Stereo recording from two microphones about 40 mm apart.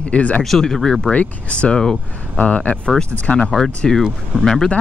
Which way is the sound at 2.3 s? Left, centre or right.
Left.